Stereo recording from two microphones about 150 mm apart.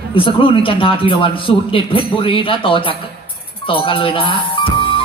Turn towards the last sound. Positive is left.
turn(degrees=35)  # may be behind; listen again after turning